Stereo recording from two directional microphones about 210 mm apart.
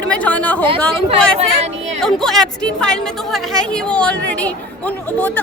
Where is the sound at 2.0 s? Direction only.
Centre (ahead or behind).